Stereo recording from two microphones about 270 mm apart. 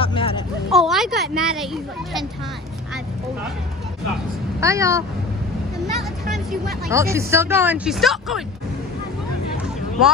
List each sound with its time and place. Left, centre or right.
0.0 s a sound: centre
0.7 s a child's voice: centre
4.6 s speech: centre
6.9 s speech: centre